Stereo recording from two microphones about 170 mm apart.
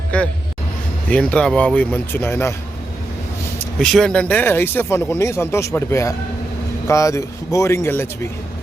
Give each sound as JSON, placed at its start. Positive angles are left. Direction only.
{"t": 0.1, "sound": "speech", "side_deg": 10}
{"t": 3.8, "sound": "speech", "side_deg": 5}